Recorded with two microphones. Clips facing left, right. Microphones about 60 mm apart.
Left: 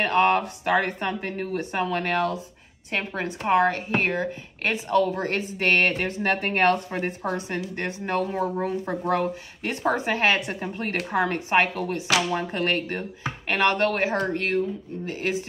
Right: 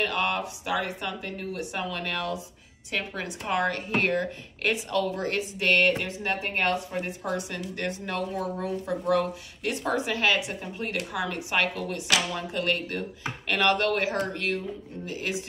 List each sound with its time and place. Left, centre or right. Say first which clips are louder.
0.0 s a woman's voice: left 7 dB; left; by 4.3 s centre
4.6 s a woman's voice: left 4 dB; left
11.5 s a woman's voice: left 5 dB; left